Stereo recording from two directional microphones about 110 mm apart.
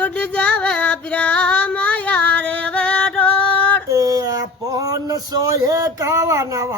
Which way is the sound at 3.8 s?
35° right (ahead or behind).